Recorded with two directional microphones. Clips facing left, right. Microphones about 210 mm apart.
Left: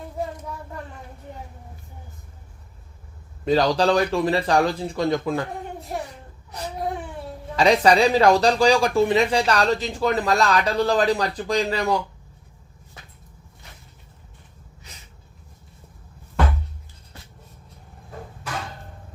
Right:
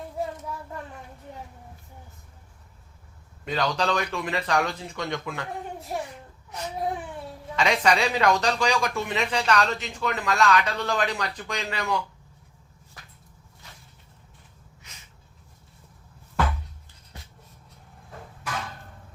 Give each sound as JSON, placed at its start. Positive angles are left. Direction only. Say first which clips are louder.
{"t": 3.4, "sound": "speech", "louder": "left 8 dB", "side_deg": 35}
{"t": 7.5, "sound": "speech", "louder": "left 6 dB", "side_deg": 35}